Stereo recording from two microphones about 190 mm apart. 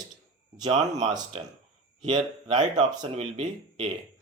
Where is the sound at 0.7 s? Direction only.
35° right (ahead or behind).